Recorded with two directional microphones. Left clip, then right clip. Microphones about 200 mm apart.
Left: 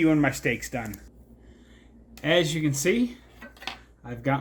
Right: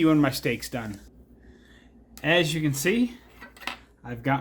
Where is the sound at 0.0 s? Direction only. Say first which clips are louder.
Right 1 dB; 10° right (ahead or behind).